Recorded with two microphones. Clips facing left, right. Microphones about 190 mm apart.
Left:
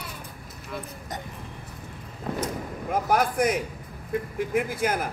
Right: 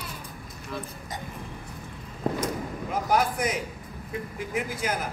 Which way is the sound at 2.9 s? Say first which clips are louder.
Left 2 dB; 55° left (ahead or behind).